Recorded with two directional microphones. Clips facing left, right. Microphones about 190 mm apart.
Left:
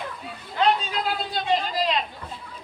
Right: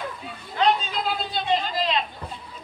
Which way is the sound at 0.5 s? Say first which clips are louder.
Even; 5° left (ahead or behind).